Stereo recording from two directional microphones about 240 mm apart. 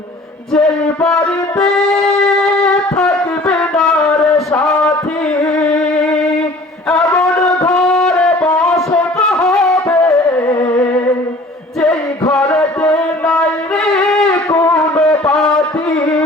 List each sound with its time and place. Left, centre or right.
0.5 s music: centre
7.1 s music: centre
12.3 s music: centre
13.8 s wind instrument: centre
14.5 s music: centre